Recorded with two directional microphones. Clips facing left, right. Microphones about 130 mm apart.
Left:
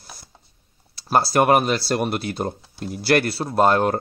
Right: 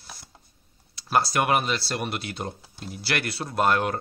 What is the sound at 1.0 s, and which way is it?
Speech, 35° left (ahead or behind).